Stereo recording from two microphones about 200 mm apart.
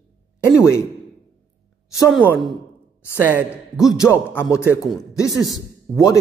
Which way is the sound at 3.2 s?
10° right (ahead or behind).